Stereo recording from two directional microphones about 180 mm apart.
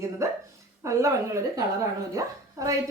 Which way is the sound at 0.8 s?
15° right (ahead or behind).